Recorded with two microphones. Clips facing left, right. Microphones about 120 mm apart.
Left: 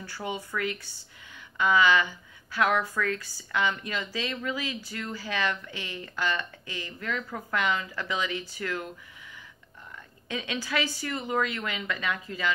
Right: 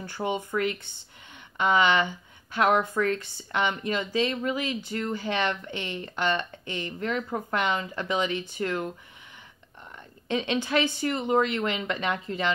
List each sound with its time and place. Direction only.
0.0 s speech: 20° right (ahead or behind)
10.2 s speech: 25° right (ahead or behind)